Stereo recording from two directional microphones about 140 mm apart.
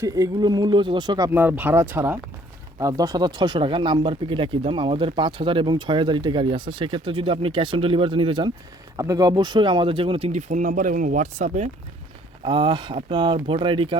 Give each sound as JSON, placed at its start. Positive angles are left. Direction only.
{"t": 0.0, "sound": "speech", "side_deg": -25}
{"t": 1.3, "sound": "speech", "side_deg": -15}
{"t": 2.7, "sound": "speech", "side_deg": -25}
{"t": 12.4, "sound": "speech", "side_deg": -35}